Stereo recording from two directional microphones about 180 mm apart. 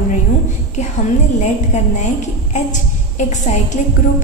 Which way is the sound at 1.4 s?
40° left (ahead or behind).